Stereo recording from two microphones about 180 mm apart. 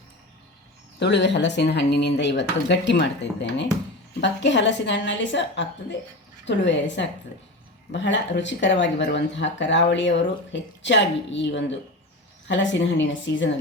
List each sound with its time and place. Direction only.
0.9 s speech: 75° left (ahead or behind)
13.0 s speech: 90° left